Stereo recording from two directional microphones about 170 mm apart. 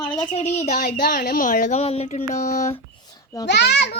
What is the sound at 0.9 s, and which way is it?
Speech, 65° left (ahead or behind).